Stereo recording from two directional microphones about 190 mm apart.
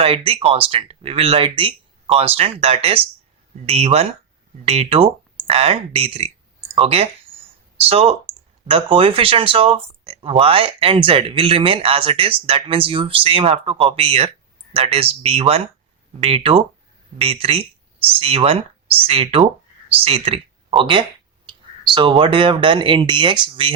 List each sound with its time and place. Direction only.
0.0 s speech: 30° right (ahead or behind)